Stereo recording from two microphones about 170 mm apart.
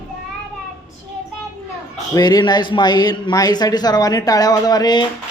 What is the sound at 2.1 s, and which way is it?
Speech, 25° left (ahead or behind).